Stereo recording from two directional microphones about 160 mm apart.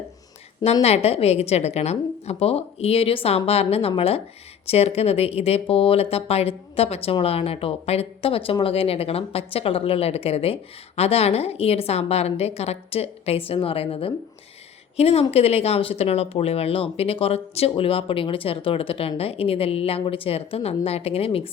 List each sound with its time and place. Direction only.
0.6 s speech: 40° left (ahead or behind)